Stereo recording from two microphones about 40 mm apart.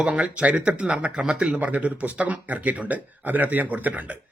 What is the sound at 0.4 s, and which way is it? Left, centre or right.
A man's voice, right.